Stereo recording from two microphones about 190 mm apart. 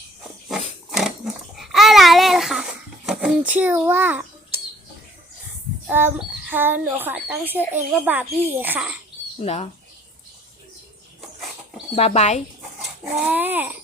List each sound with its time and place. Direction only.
0.9 s babbling: centre (ahead or behind)
3.1 s a child's voice: 5° right (ahead or behind)
5.9 s a child's voice: 10° right (ahead or behind)
9.4 s speech: 35° left (ahead or behind)
11.9 s speech: 35° left (ahead or behind)
13.1 s a child's voice: 10° right (ahead or behind)